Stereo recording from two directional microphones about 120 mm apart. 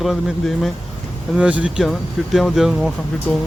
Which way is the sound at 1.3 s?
10° right (ahead or behind).